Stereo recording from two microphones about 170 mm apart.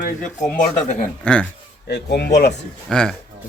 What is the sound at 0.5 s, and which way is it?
Speech, 45° left (ahead or behind).